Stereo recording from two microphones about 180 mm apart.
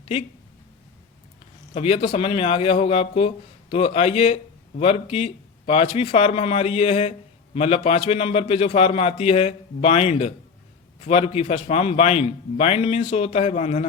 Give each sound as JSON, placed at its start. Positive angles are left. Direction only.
{"t": 1.7, "sound": "a man's voice", "side_deg": 35}